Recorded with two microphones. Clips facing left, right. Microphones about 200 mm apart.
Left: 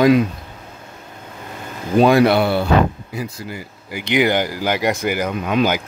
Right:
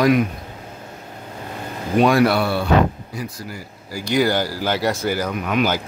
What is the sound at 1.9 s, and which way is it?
Speech, 25° left (ahead or behind).